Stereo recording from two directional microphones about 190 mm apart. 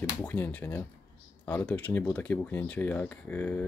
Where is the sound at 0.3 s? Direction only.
10° left (ahead or behind).